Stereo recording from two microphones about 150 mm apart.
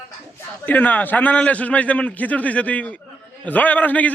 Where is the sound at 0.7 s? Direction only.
10° left (ahead or behind).